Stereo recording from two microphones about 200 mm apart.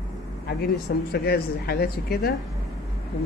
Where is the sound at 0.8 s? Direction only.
50° left (ahead or behind).